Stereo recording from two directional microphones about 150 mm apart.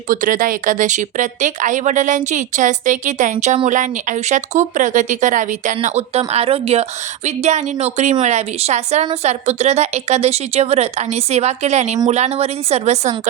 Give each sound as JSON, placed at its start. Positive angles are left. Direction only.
{"t": 0.1, "sound": "speech", "side_deg": -65}